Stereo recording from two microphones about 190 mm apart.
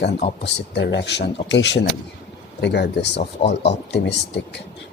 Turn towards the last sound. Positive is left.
turn(degrees=65)  # may be behind; listen again after turning